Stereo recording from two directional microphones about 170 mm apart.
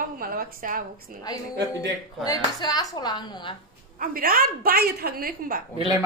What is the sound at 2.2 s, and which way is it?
A woman's voice, 20° left (ahead or behind).